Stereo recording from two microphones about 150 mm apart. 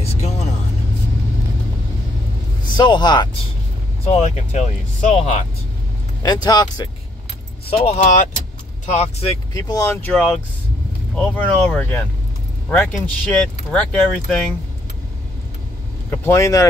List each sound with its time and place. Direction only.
0.0 s vehicle: 45° left (ahead or behind)
2.6 s speech: 30° left (ahead or behind)
4.1 s speech: 50° left (ahead or behind)
6.2 s speech: 25° left (ahead or behind)
7.7 s speech: 40° left (ahead or behind)
9.5 s speech: 25° left (ahead or behind)
10.0 s speech: 10° left (ahead or behind)
16.1 s speech: 20° left (ahead or behind)